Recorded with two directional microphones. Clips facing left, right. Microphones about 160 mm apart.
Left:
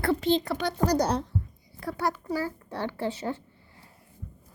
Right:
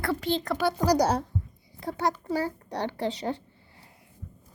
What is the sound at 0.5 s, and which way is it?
Speech, 5° right (ahead or behind).